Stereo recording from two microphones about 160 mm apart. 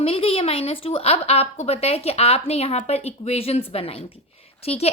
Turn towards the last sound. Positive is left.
turn(degrees=40)  # may be behind; listen again after turning